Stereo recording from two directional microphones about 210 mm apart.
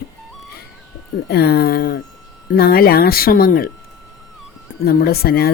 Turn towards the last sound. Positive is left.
turn(degrees=45)  # may be behind; listen again after turning